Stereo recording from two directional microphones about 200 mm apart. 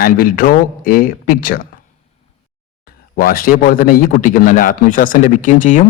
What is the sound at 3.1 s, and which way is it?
A man's voice, 45° left (ahead or behind).